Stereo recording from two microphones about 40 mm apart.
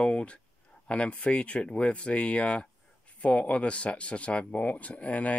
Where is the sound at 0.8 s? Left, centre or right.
Left.